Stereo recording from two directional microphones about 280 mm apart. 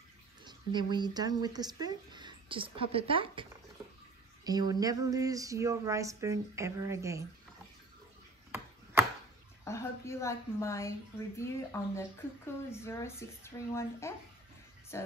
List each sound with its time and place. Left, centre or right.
0.4 s speech: centre
4.5 s a sound: centre
9.7 s a woman's voice: centre